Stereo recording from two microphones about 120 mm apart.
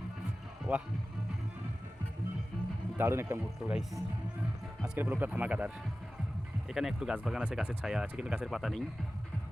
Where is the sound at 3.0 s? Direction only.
20° right (ahead or behind).